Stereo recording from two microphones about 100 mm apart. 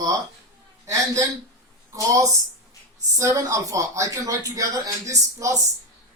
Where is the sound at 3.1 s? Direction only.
30° right (ahead or behind).